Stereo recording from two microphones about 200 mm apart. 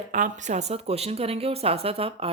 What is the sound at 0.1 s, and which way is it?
Speech, 40° right (ahead or behind).